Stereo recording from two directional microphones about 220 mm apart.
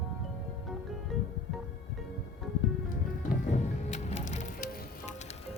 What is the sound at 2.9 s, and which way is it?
Music, 35° left (ahead or behind).